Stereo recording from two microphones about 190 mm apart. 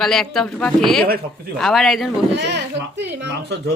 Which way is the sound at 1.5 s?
Centre (ahead or behind).